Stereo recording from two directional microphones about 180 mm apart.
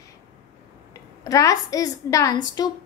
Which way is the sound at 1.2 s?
20° left (ahead or behind).